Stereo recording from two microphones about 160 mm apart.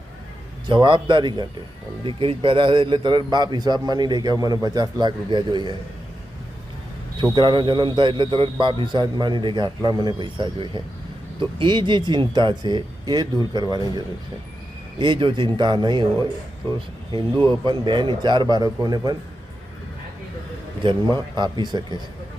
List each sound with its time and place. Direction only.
0.7 s a man's voice: 30° right (ahead or behind)
7.3 s a man's voice: 30° right (ahead or behind)
17.4 s a man's voice: 30° right (ahead or behind)
20.8 s a man's voice: 25° right (ahead or behind)